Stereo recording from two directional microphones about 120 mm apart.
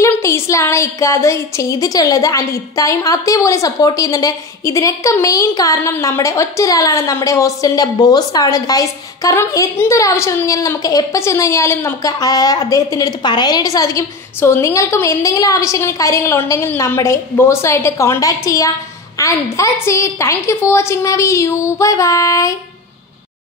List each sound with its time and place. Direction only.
0.2 s a woman's voice: 25° left (ahead or behind)